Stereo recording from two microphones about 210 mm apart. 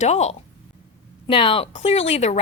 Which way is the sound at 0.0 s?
30° left (ahead or behind).